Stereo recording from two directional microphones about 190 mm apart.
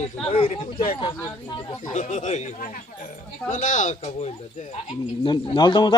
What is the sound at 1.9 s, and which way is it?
Speech, 40° left (ahead or behind).